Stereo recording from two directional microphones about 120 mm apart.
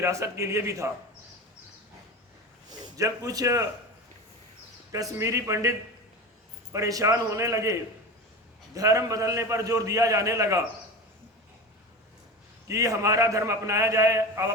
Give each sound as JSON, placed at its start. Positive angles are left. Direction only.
{"t": 0.0, "sound": "a man's voice", "side_deg": -25}
{"t": 2.6, "sound": "a man's voice", "side_deg": -30}
{"t": 4.9, "sound": "a man's voice", "side_deg": -30}
{"t": 6.7, "sound": "a man's voice", "side_deg": -30}
{"t": 12.6, "sound": "a man's voice", "side_deg": -25}